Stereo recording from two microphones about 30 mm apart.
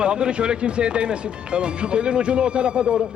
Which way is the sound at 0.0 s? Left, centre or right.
Right.